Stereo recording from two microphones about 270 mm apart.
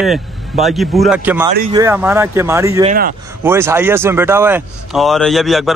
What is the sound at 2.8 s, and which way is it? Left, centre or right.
Speech, right.